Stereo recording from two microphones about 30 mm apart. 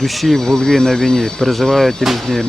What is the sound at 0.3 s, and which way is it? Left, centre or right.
Speech, centre.